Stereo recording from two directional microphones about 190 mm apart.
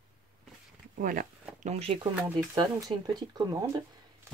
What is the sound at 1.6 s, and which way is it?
Speech, 35° right (ahead or behind).